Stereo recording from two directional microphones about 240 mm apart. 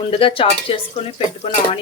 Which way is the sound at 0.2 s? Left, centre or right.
Left.